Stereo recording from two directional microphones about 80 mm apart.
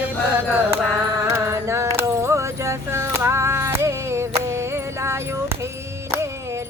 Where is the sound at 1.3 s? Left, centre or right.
Right.